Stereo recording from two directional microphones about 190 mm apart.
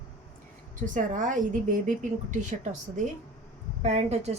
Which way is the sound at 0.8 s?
45° right (ahead or behind).